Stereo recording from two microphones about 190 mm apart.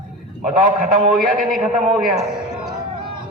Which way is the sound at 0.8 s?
50° right (ahead or behind).